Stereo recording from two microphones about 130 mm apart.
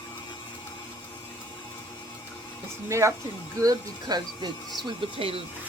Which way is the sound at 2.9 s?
20° right (ahead or behind).